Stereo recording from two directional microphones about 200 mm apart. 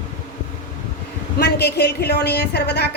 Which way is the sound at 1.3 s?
55° left (ahead or behind).